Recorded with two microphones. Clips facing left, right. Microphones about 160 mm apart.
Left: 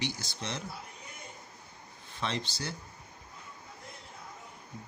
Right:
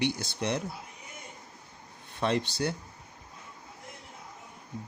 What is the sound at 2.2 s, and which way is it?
Speech, 55° right (ahead or behind).